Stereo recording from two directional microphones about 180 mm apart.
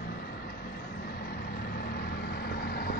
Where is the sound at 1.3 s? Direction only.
60° left (ahead or behind).